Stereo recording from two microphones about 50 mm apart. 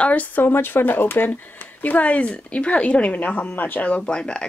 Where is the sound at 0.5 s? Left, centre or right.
Left.